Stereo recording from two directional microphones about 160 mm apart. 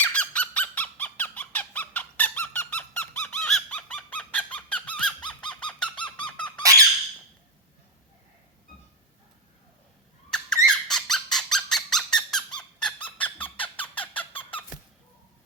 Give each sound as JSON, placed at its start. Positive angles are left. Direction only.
{"t": 0.0, "sound": "a sound", "side_deg": 10}
{"t": 6.2, "sound": "squeak", "side_deg": 10}
{"t": 6.6, "sound": "squeak", "side_deg": -20}
{"t": 10.2, "sound": "squeak", "side_deg": 5}